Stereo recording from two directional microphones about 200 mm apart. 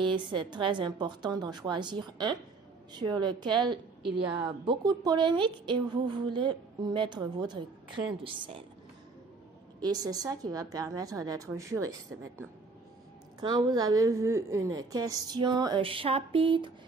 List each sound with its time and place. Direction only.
0.0 s a woman's voice: 25° right (ahead or behind)
9.8 s a woman's voice: 20° right (ahead or behind)
13.4 s a woman's voice: 20° right (ahead or behind)